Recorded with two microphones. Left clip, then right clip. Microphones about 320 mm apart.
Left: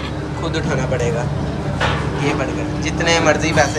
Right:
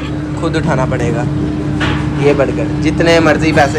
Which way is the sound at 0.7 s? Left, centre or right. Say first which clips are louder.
Right 5 dB; left.